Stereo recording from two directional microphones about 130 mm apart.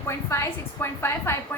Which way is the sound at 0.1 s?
20° left (ahead or behind).